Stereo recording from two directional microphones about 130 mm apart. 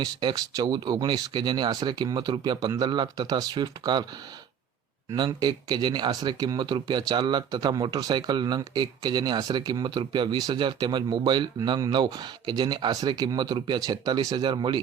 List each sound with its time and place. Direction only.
0.0 s speech: 30° right (ahead or behind)
5.1 s speech: 35° right (ahead or behind)